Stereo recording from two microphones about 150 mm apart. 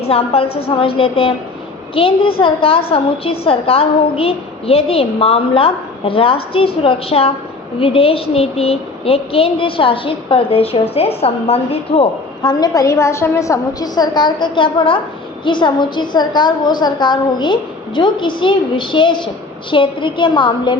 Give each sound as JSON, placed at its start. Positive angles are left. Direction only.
{"t": 0.0, "sound": "a woman's voice", "side_deg": 40}